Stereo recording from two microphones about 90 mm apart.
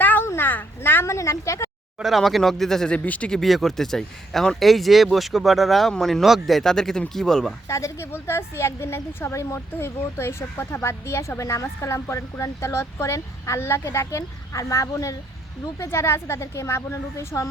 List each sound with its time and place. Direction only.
0.0 s a sound: 20° left (ahead or behind)
2.0 s speech: centre (ahead or behind)
7.7 s a woman's voice: 35° left (ahead or behind)